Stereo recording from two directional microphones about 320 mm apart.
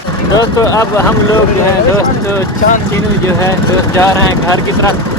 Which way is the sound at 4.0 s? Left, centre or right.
Centre.